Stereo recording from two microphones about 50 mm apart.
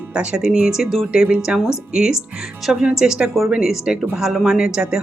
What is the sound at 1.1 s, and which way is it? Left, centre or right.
A woman's voice, centre.